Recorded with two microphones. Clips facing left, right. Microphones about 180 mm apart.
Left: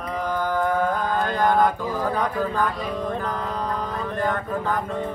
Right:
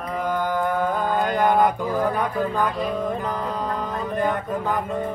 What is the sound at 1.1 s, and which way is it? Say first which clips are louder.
Mantra: right 2 dB; 15° right (ahead or behind).